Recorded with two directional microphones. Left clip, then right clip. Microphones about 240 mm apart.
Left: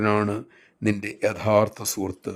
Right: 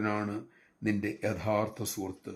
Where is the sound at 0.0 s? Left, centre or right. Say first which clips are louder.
Left 10 dB; left.